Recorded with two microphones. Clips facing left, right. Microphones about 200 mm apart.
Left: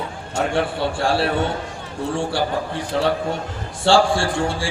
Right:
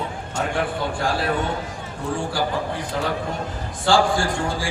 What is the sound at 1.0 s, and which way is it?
Speech, 30° left (ahead or behind).